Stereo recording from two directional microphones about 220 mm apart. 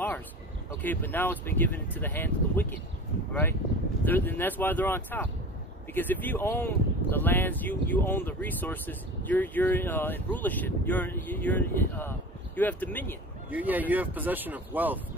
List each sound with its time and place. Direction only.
0.8 s speech: 10° left (ahead or behind)
4.0 s speech: 10° left (ahead or behind)
13.5 s speech: 5° right (ahead or behind)